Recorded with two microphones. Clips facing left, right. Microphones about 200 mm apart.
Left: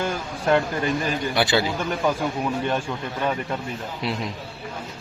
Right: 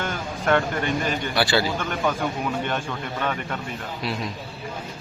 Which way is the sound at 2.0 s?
10° left (ahead or behind).